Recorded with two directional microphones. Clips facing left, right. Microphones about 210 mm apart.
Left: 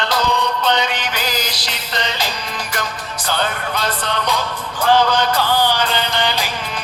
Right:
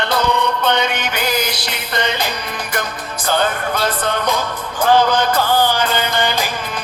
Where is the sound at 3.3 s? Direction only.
50° right (ahead or behind).